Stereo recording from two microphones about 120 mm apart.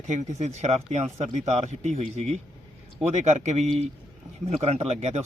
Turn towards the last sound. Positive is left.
turn(degrees=-65)  # may be behind; listen again after turning